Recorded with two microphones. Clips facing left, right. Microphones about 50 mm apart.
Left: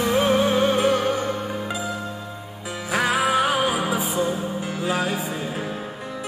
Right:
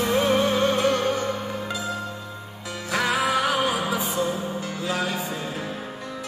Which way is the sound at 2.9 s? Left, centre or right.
Centre.